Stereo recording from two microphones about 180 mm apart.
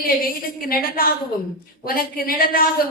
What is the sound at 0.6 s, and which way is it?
A woman's voice, 55° left (ahead or behind).